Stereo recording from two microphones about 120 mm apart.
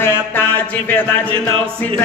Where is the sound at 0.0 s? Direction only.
15° left (ahead or behind).